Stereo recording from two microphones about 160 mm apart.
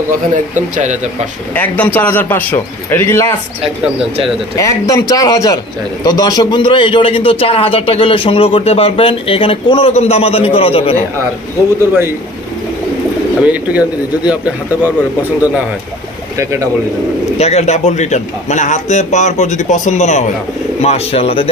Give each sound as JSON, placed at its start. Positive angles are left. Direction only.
{"t": 0.1, "sound": "speech", "side_deg": -50}
{"t": 1.5, "sound": "a man's voice", "side_deg": 10}
{"t": 4.6, "sound": "a man's voice", "side_deg": 20}
{"t": 13.4, "sound": "speech", "side_deg": -10}
{"t": 17.4, "sound": "a man's voice", "side_deg": 45}